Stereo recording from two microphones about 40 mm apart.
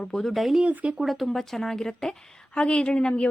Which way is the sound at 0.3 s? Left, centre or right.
Centre.